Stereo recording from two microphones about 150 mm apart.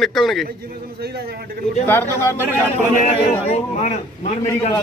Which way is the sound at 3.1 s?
45° left (ahead or behind).